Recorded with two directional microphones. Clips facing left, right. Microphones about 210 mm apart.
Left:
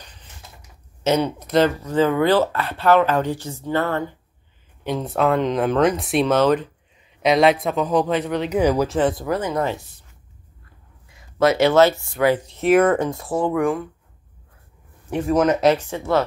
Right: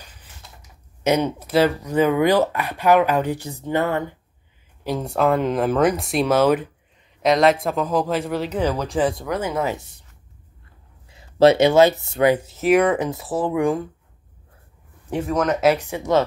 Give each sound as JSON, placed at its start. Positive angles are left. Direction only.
{"t": 1.0, "sound": "speech", "side_deg": -15}
{"t": 4.8, "sound": "speech", "side_deg": 0}
{"t": 8.5, "sound": "speech", "side_deg": 10}
{"t": 11.1, "sound": "a sound", "side_deg": -30}
{"t": 11.5, "sound": "speech", "side_deg": -15}
{"t": 12.4, "sound": "speech", "side_deg": -5}
{"t": 15.2, "sound": "speech", "side_deg": 0}